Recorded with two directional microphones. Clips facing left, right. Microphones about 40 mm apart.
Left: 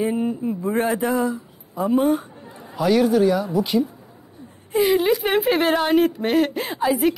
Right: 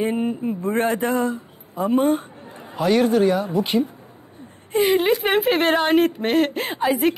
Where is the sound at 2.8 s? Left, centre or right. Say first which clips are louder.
Even; right.